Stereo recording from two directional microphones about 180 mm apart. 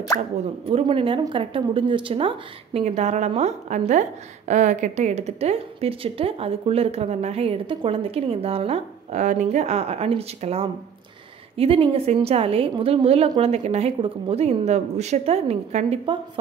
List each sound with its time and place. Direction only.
0.7 s a woman's voice: 30° right (ahead or behind)